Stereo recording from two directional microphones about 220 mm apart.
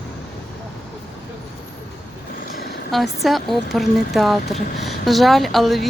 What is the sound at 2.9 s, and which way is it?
Speech, centre (ahead or behind).